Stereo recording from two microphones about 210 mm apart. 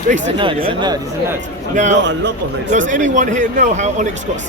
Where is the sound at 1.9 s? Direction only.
55° right (ahead or behind).